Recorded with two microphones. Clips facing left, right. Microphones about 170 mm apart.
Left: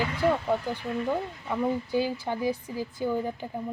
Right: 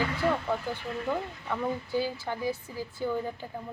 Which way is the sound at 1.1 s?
15° left (ahead or behind).